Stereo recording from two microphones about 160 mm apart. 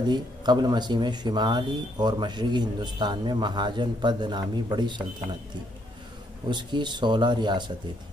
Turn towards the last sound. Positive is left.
turn(degrees=-30)  # may be behind; listen again after turning